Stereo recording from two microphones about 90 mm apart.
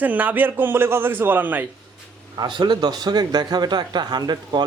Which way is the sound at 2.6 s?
50° right (ahead or behind).